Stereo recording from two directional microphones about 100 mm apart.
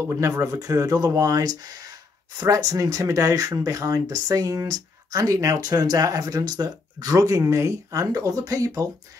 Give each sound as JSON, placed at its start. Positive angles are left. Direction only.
{"t": 0.0, "sound": "speech", "side_deg": -30}